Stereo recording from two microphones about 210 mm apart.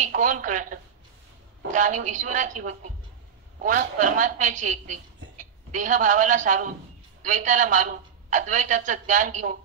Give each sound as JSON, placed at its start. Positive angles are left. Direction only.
{"t": 0.0, "sound": "a woman's voice", "side_deg": -40}